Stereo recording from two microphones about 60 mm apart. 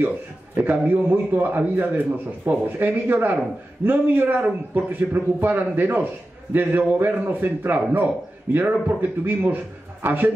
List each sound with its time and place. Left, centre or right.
0.6 s a man's voice: right